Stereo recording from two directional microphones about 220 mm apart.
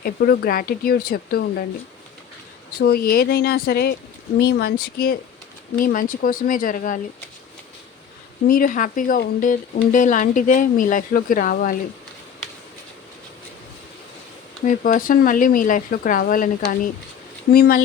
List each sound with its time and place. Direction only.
0.0 s speech: 40° left (ahead or behind)
2.7 s speech: 45° left (ahead or behind)
8.4 s speech: 40° left (ahead or behind)
14.6 s speech: 35° left (ahead or behind)